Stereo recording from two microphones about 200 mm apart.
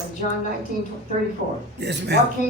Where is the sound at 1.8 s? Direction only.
60° right (ahead or behind).